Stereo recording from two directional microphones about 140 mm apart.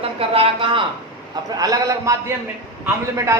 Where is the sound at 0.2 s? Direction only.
40° right (ahead or behind).